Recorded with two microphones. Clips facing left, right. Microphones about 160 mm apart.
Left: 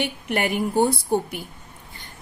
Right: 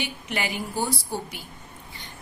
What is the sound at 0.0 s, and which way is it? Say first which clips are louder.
A woman's voice: left 6 dB; 55° left (ahead or behind).